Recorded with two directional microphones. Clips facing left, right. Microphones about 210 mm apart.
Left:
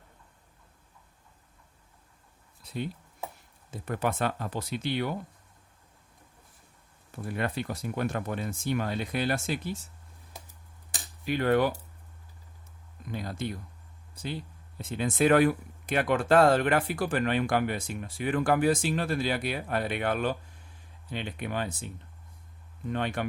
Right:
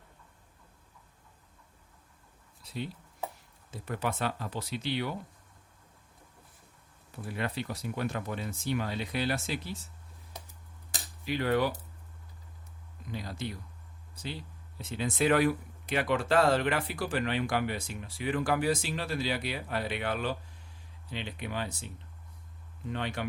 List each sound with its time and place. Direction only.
3.7 s speech: 50° left (ahead or behind)
7.3 s speech: 50° left (ahead or behind)
11.3 s speech: 50° left (ahead or behind)
13.1 s speech: 50° left (ahead or behind)
22.9 s speech: 50° left (ahead or behind)